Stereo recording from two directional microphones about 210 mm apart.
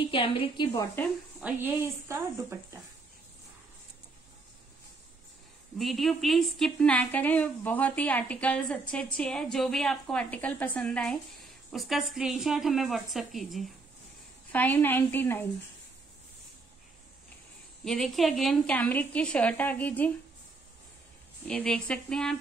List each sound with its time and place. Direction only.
0.0 s a woman's voice: 25° left (ahead or behind)
1.4 s speech: 10° right (ahead or behind)
5.8 s a woman's voice: centre (ahead or behind)
17.8 s a woman's voice: centre (ahead or behind)
21.5 s a woman's voice: 5° left (ahead or behind)